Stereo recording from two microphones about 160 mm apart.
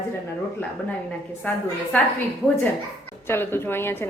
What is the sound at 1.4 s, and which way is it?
Speech, 10° left (ahead or behind).